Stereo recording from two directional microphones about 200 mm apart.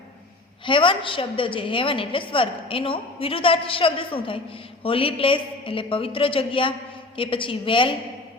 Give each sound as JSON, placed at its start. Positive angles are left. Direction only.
{"t": 0.6, "sound": "a woman's voice", "side_deg": 25}